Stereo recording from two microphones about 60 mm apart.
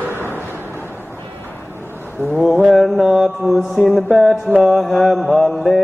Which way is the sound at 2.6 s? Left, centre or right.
Centre.